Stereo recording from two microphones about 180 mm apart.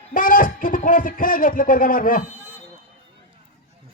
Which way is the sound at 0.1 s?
50° left (ahead or behind).